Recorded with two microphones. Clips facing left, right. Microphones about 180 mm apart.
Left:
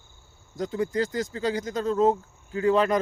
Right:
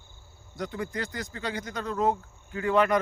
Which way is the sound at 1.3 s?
30° left (ahead or behind).